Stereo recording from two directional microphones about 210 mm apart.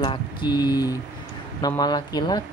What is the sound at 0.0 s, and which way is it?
Mantra, 20° left (ahead or behind).